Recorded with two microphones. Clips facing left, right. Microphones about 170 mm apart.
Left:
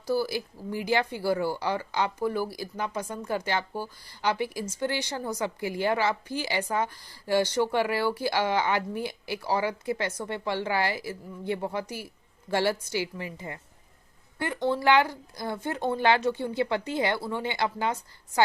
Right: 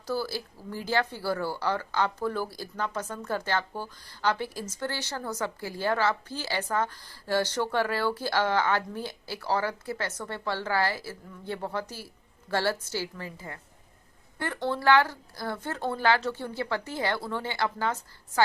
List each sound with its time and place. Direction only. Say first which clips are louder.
0.1 s speech: left 4 dB; 15° left (ahead or behind)